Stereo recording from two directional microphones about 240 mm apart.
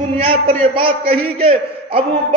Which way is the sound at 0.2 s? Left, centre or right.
Right.